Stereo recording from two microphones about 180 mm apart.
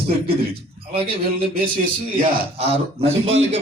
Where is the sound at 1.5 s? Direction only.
50° right (ahead or behind).